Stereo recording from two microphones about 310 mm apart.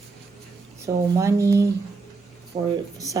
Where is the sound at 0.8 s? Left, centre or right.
Centre.